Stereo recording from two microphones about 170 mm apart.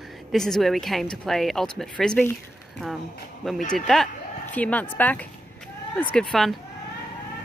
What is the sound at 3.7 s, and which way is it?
A woman's voice, centre (ahead or behind).